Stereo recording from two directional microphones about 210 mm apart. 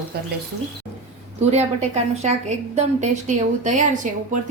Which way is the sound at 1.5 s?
30° right (ahead or behind).